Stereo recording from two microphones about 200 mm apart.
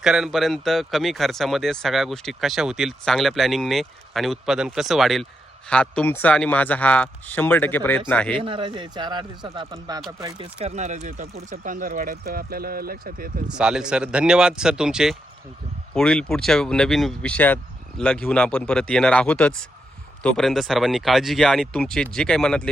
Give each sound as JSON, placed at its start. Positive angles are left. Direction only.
{"t": 0.0, "sound": "speech", "side_deg": -5}
{"t": 8.4, "sound": "speech", "side_deg": -25}
{"t": 13.5, "sound": "speech", "side_deg": -5}